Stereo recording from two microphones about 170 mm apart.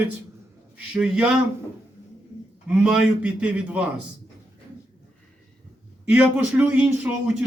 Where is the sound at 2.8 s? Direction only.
5° right (ahead or behind).